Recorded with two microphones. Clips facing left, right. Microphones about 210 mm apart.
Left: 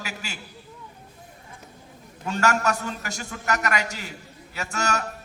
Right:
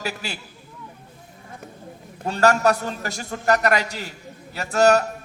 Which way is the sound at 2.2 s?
35° right (ahead or behind).